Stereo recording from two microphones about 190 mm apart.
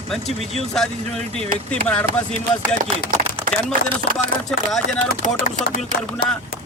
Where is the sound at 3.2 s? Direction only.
40° right (ahead or behind).